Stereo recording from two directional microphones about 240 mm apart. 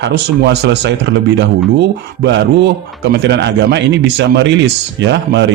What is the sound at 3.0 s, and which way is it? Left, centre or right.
Mantra, right.